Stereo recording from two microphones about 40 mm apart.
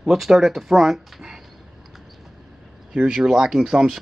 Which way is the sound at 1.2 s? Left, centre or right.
Centre.